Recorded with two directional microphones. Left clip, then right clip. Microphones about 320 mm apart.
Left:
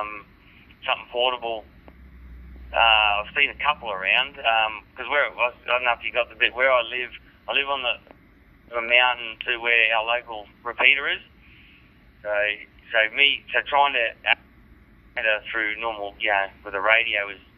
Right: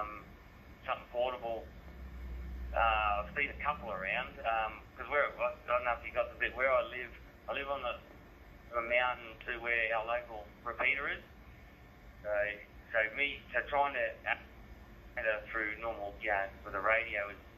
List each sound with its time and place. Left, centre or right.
0.8 s speech: centre
2.7 s speech: centre
12.3 s speech: centre